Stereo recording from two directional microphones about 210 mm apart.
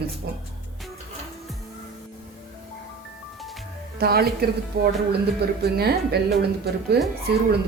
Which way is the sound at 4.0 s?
45° right (ahead or behind).